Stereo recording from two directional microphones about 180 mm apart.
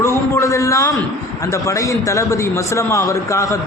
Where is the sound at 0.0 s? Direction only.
15° left (ahead or behind).